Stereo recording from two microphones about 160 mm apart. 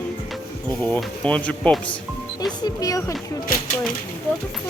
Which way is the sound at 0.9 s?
10° left (ahead or behind).